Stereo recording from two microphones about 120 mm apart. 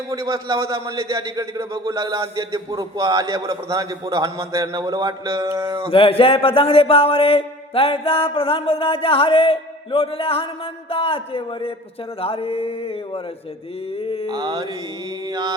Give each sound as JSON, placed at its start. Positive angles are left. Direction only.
{"t": 0.1, "sound": "a man's voice", "side_deg": -25}
{"t": 5.9, "sound": "speech", "side_deg": 50}
{"t": 14.0, "sound": "speech", "side_deg": 50}
{"t": 14.3, "sound": "a man's voice", "side_deg": -35}